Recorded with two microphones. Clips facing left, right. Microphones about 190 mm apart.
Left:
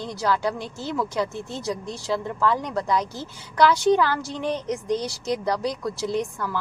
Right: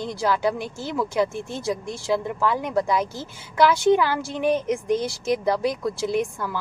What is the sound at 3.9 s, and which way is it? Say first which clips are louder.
Speech: right 1 dB; 15° right (ahead or behind).